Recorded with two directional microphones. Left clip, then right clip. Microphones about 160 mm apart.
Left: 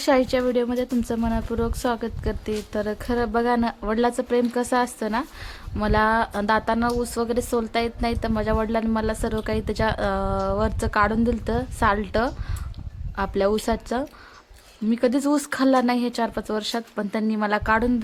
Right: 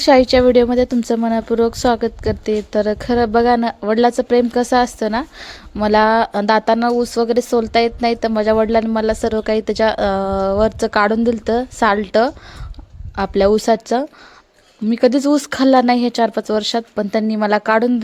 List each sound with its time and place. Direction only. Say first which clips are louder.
0.0 s a woman's voice: right 10 dB; 30° right (ahead or behind)